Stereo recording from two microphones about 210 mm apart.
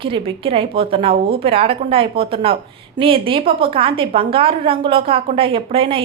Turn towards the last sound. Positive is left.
turn(degrees=-25)  # may be behind; listen again after turning